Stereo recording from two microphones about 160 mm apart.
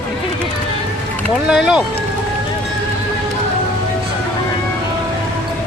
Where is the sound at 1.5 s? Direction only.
5° right (ahead or behind).